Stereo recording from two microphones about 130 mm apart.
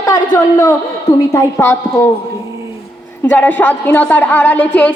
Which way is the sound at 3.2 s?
10° left (ahead or behind).